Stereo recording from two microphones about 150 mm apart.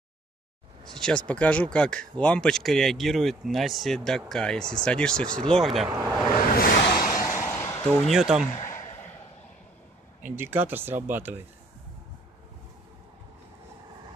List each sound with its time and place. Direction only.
0.9 s speech: 5° left (ahead or behind)
6.5 s a sound: 75° left (ahead or behind)
7.2 s vehicle: 20° left (ahead or behind)
7.6 s a sound: 20° left (ahead or behind)
8.1 s speech: 5° right (ahead or behind)
10.3 s speech: 15° right (ahead or behind)